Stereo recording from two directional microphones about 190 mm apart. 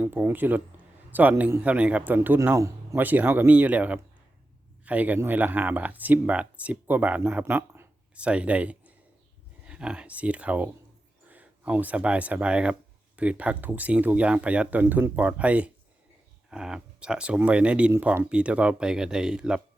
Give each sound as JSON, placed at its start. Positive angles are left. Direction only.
{"t": 0.0, "sound": "speech", "side_deg": -10}